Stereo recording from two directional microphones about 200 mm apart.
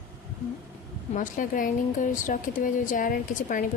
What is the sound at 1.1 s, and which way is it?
Speech, 40° left (ahead or behind).